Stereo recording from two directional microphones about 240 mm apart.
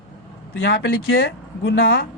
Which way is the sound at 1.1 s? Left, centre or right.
Left.